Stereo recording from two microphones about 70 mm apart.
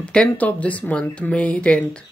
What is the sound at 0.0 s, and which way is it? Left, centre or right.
Speech, centre.